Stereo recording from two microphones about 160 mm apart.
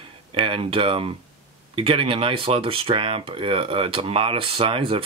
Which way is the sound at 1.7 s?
35° right (ahead or behind).